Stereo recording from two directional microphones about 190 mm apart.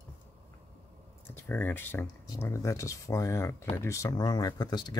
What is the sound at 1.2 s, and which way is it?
Speech, 10° left (ahead or behind).